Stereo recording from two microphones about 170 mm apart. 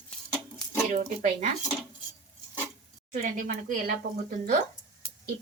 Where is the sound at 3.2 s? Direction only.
50° right (ahead or behind).